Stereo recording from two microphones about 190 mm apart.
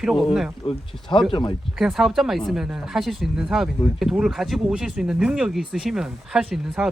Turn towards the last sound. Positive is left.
turn(degrees=-5)  # may be behind; listen again after turning